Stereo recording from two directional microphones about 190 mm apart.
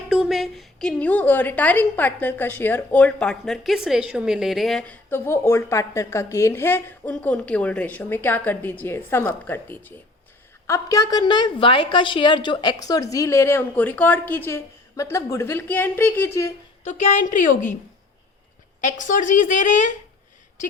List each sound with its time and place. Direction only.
0.1 s a woman's voice: centre (ahead or behind); by 16.6 s 15° left (ahead or behind)
16.8 s a woman's voice: 40° left (ahead or behind)
18.8 s a woman's voice: 40° left (ahead or behind)